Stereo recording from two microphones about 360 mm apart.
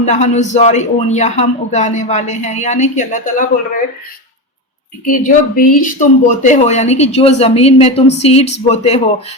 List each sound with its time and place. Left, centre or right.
0.0 s a man's voice: centre
5.0 s a man's voice: left